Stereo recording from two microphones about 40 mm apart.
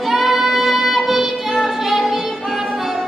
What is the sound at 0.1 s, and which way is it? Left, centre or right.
Music, centre.